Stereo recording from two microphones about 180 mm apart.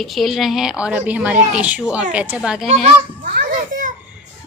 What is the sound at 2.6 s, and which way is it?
Speech, 35° right (ahead or behind).